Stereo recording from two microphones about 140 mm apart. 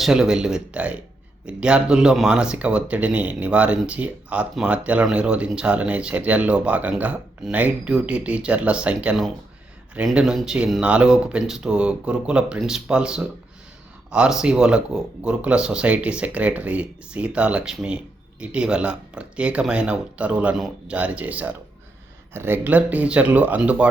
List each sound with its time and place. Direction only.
0.0 s speech: 5° right (ahead or behind)